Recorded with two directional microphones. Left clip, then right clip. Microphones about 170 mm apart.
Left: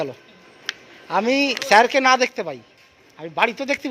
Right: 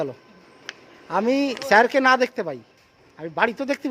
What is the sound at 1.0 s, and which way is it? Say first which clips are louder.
Speech: left 2 dB; 15° right (ahead or behind).